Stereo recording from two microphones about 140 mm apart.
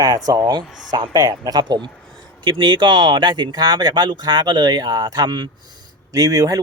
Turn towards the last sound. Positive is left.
turn(degrees=-25)  # may be behind; listen again after turning